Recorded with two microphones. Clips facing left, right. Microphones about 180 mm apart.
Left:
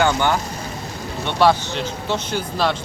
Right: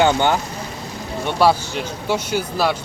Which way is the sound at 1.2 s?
10° right (ahead or behind).